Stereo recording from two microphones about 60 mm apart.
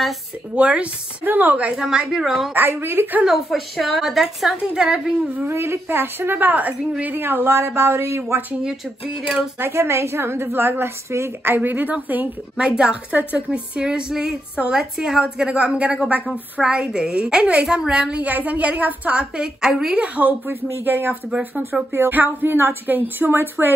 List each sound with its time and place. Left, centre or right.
0.6 s a woman's voice: right
1.8 s a woman's voice: centre
2.7 s a woman's voice: right
3.3 s a woman's voice: centre
5.5 s a woman's voice: right
7.2 s a woman's voice: right
9.6 s a woman's voice: right
11.4 s a woman's voice: right
12.5 s a woman's voice: centre
18.2 s a woman's voice: right; by 20.0 s centre
20.0 s a woman's voice: right